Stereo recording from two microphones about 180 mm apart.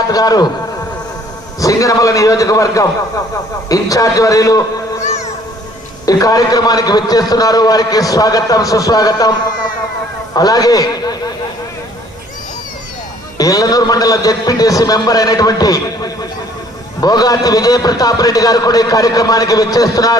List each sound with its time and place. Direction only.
0.1 s a man's voice: 20° left (ahead or behind)
1.5 s a man's voice: 20° left (ahead or behind)
6.1 s a man's voice: 20° left (ahead or behind)
10.3 s a man's voice: 20° left (ahead or behind)
13.4 s a man's voice: 20° left (ahead or behind)